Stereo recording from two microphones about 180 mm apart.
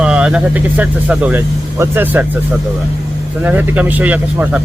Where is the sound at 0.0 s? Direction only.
5° right (ahead or behind).